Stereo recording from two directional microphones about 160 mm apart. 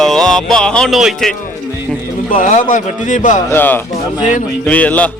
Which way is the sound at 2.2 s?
55° left (ahead or behind).